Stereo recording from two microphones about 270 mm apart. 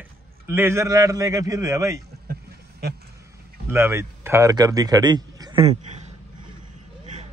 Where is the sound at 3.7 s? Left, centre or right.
Centre.